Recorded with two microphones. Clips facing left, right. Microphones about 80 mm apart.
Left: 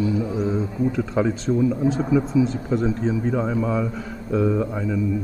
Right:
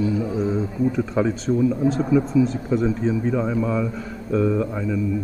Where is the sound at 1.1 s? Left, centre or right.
Centre.